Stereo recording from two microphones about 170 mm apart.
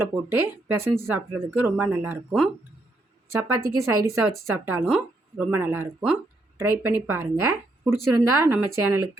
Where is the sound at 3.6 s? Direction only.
20° right (ahead or behind).